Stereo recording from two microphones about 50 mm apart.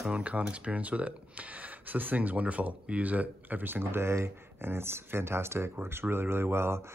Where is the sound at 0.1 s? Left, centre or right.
Right.